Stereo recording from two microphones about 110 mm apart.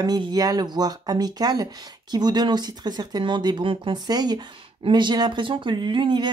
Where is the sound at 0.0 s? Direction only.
40° right (ahead or behind).